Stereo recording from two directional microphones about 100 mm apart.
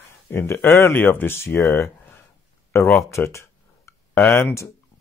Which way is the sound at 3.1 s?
30° left (ahead or behind).